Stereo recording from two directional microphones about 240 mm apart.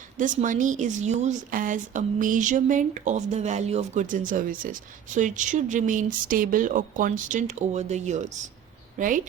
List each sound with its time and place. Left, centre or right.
0.2 s a woman's voice: right